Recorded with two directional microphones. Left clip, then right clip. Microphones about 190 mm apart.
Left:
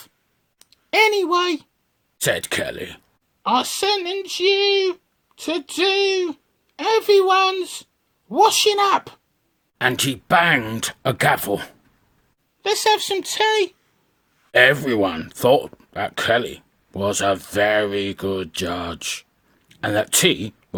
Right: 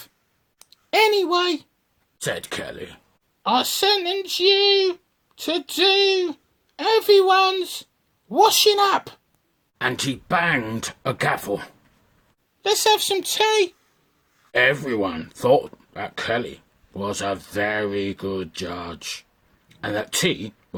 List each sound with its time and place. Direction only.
0.7 s speech: 5° left (ahead or behind)
2.1 s speech: 35° left (ahead or behind)
3.4 s speech: 10° left (ahead or behind)
9.7 s speech: 35° left (ahead or behind)
12.6 s speech: 5° left (ahead or behind)
14.5 s speech: 40° left (ahead or behind)